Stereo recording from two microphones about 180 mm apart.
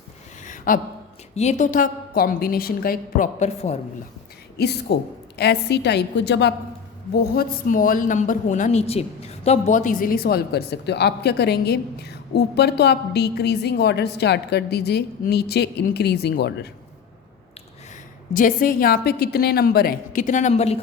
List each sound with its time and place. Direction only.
0.4 s a sound: 45° left (ahead or behind)
1.4 s a woman's voice: 40° left (ahead or behind)
4.5 s a woman's voice: 65° left (ahead or behind)
7.1 s speech: 60° left (ahead or behind)
18.3 s a woman's voice: 50° left (ahead or behind); by 20.8 s 35° left (ahead or behind)